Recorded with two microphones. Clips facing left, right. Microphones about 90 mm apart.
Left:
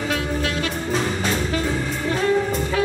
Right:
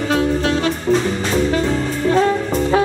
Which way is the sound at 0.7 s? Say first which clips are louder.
Right 6 dB; centre (ahead or behind).